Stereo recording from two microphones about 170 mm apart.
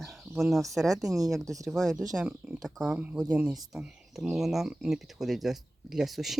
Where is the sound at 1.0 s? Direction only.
20° right (ahead or behind).